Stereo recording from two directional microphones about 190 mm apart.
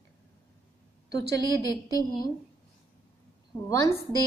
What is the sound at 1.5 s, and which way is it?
Speech, 20° left (ahead or behind).